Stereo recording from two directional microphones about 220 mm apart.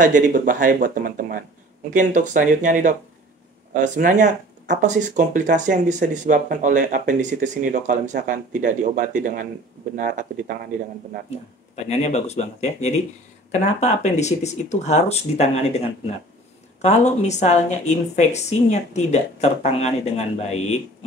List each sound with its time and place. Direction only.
0.0 s speech: 35° right (ahead or behind)
11.2 s speech: 30° left (ahead or behind)
16.8 s speech: 30° left (ahead or behind)